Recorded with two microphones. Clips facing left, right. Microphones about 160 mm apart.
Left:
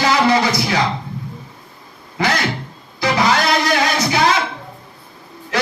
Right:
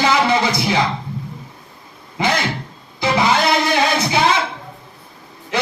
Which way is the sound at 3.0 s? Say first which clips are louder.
Even; 25° right (ahead or behind).